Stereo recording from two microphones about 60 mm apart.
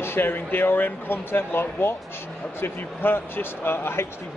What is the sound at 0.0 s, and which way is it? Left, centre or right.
Speech, left.